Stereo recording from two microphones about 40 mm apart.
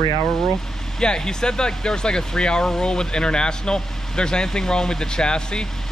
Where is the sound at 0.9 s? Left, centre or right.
Centre.